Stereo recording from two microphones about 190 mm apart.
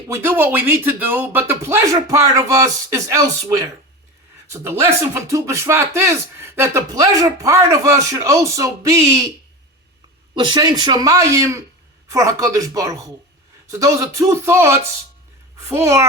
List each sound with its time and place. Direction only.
0.1 s speech: 10° right (ahead or behind)
10.3 s speech: 25° right (ahead or behind)